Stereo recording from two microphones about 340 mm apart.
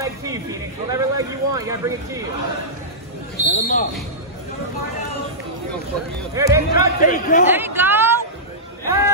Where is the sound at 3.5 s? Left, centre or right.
Left.